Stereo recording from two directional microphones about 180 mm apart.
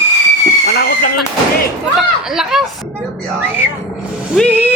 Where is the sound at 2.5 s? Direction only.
Centre (ahead or behind).